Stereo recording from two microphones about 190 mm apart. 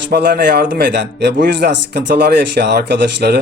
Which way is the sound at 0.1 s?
50° right (ahead or behind).